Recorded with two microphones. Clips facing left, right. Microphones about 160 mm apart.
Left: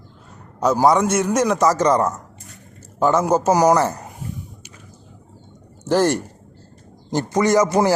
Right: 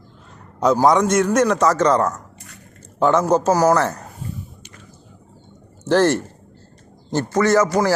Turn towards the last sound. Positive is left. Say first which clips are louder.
# even
turn(degrees=15)  # may be behind; listen again after turning